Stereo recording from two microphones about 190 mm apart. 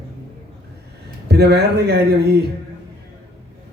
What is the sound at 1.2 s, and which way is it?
A man's voice, 60° right (ahead or behind).